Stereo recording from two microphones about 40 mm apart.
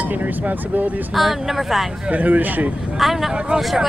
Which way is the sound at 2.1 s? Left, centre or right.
Right.